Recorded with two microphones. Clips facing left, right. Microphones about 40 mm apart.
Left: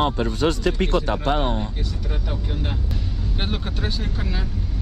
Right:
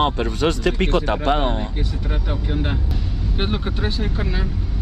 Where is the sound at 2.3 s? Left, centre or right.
Right.